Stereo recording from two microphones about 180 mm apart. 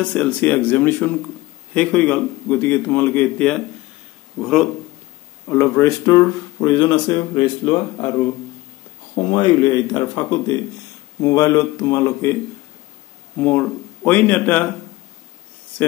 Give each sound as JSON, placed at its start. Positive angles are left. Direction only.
{"t": 0.0, "sound": "a man's voice", "side_deg": 5}
{"t": 5.5, "sound": "speech", "side_deg": 15}
{"t": 9.3, "sound": "speech", "side_deg": 25}
{"t": 11.2, "sound": "a man's voice", "side_deg": 20}
{"t": 13.4, "sound": "speech", "side_deg": 10}